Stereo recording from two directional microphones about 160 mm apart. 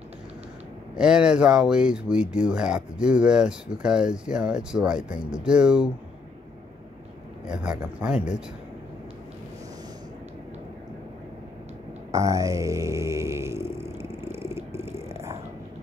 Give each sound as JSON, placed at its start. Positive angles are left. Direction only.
{"t": 0.9, "sound": "speech", "side_deg": -5}
{"t": 7.4, "sound": "speech", "side_deg": -5}
{"t": 12.1, "sound": "a sound", "side_deg": -20}